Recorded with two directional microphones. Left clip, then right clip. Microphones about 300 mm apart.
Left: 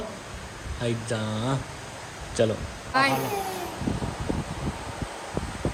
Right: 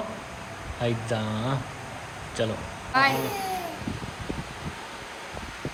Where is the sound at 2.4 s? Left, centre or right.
Centre.